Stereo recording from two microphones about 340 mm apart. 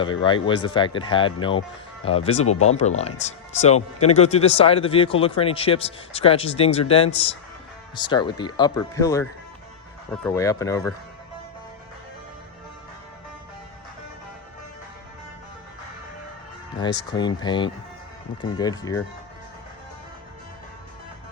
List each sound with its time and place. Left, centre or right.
0.0 s speech: centre
16.8 s speech: centre